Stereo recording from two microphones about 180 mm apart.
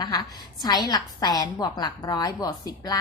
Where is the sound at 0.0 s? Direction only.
25° left (ahead or behind).